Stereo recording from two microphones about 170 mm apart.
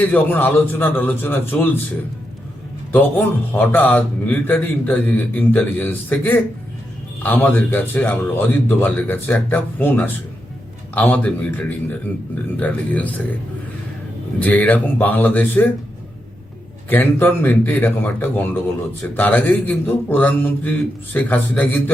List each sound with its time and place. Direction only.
0.0 s a man's voice: 10° left (ahead or behind)
2.9 s a man's voice: 10° left (ahead or behind)
14.3 s a man's voice: 10° left (ahead or behind)
16.9 s a man's voice: 10° left (ahead or behind)